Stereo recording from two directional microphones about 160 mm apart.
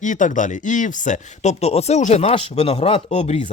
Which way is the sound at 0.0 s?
50° left (ahead or behind).